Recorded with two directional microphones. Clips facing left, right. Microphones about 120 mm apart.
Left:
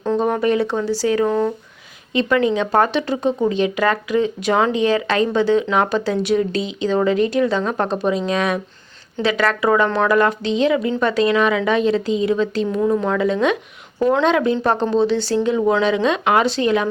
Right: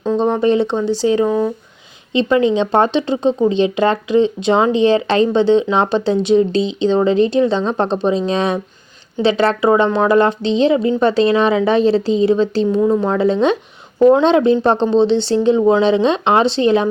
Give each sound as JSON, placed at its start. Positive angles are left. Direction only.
{"t": 0.0, "sound": "speech", "side_deg": -20}
{"t": 1.3, "sound": "speech", "side_deg": -10}
{"t": 2.1, "sound": "speech", "side_deg": -25}